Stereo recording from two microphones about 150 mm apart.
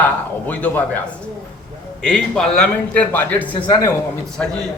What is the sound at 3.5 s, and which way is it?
Speech, 25° left (ahead or behind).